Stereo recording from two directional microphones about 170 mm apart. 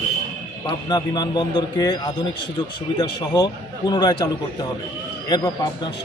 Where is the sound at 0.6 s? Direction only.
25° left (ahead or behind).